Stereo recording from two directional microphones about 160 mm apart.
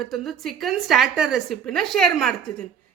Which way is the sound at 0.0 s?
Centre (ahead or behind).